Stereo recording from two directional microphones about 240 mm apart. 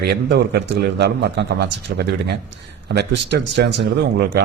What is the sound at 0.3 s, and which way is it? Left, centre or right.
Speech, right.